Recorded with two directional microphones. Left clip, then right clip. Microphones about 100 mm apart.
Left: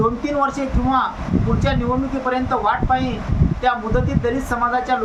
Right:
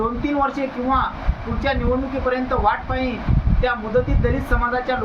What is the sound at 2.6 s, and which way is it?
A woman's voice, 10° left (ahead or behind).